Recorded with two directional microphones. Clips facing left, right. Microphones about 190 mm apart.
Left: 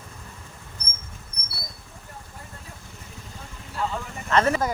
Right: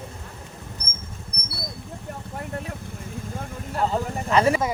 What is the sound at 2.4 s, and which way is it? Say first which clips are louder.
Vehicle: right 12 dB; 70° right (ahead or behind).